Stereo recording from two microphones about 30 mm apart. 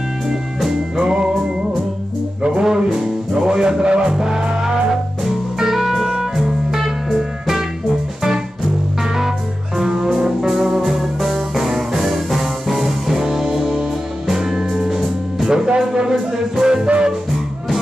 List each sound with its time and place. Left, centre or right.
0.9 s music: right
2.6 s music: centre
9.0 s music: centre
15.5 s music: right